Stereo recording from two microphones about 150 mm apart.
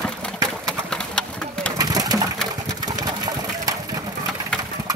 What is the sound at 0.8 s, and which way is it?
Engine, 5° left (ahead or behind).